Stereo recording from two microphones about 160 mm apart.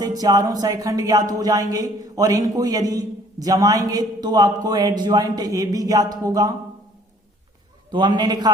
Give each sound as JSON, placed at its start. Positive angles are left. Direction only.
{"t": 0.0, "sound": "speech", "side_deg": -25}
{"t": 7.9, "sound": "speech", "side_deg": -30}